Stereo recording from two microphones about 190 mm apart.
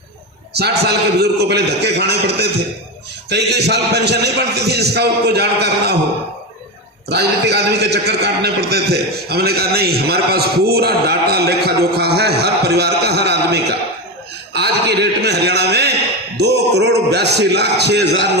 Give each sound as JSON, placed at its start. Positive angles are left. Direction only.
{"t": 0.5, "sound": "a man's voice", "side_deg": -60}
{"t": 7.1, "sound": "a man's voice", "side_deg": -60}